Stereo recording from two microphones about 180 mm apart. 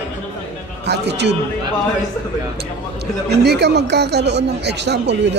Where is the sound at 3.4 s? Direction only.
70° right (ahead or behind).